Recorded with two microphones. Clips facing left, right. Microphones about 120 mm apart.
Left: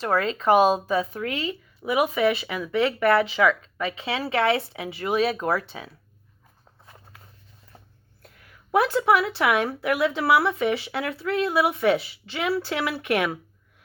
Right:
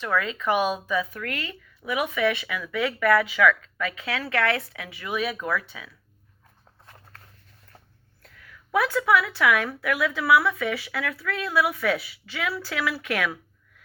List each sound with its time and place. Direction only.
0.0 s a woman's voice: 35° left (ahead or behind)
6.8 s walk: 10° left (ahead or behind)
8.2 s a sound: 30° left (ahead or behind)
9.5 s speech: 30° left (ahead or behind)